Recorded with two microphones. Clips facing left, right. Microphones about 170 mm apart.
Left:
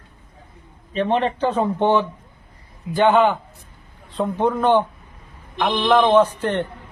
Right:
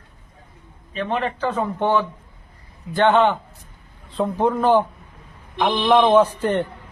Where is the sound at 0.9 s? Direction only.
30° left (ahead or behind).